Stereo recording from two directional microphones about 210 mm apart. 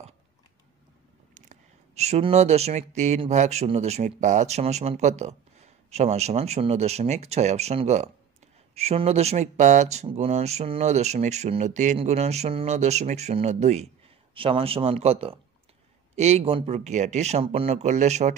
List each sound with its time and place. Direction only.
1.3 s speech: 35° right (ahead or behind)